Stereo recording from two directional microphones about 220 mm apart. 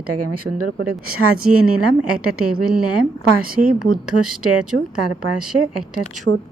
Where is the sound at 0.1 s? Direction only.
90° right.